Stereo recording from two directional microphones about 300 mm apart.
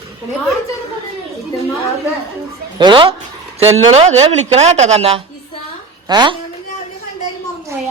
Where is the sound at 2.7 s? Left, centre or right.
Centre.